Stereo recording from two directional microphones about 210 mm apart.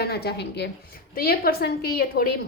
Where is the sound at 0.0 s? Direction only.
50° left (ahead or behind).